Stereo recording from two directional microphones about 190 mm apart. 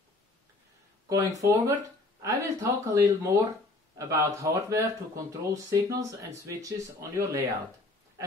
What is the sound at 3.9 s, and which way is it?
Speech, 15° right (ahead or behind).